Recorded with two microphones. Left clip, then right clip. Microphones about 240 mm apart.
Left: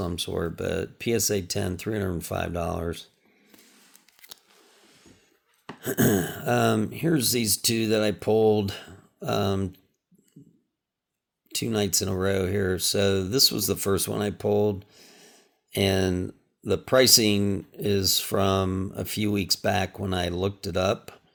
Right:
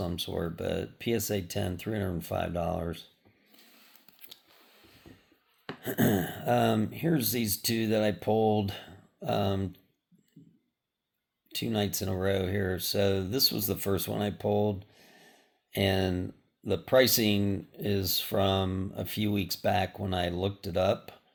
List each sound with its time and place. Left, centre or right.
0.0 s speech: left
5.8 s speech: left
11.6 s speech: left